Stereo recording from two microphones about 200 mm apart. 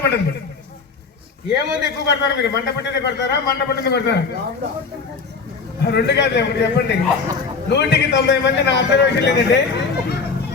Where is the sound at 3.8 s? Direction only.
55° left (ahead or behind).